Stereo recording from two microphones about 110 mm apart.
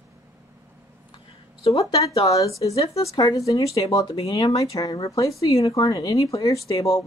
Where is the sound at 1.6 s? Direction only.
65° left (ahead or behind).